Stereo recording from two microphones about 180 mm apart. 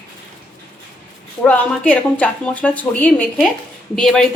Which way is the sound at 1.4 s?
5° left (ahead or behind).